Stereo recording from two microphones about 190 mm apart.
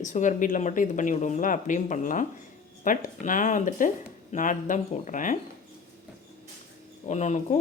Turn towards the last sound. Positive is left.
turn(degrees=40)  # may be behind; listen again after turning